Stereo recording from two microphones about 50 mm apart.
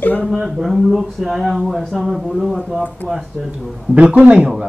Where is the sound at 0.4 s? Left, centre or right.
Centre.